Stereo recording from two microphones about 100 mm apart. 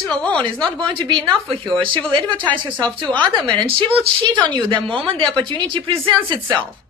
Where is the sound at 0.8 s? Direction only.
55° right (ahead or behind).